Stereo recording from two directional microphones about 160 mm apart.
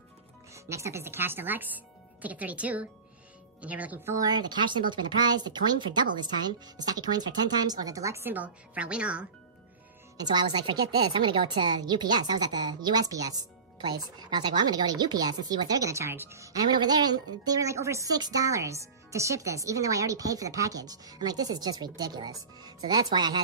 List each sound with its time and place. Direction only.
0.7 s a woman's voice: 20° right (ahead or behind)
10.1 s a woman's voice: 25° right (ahead or behind)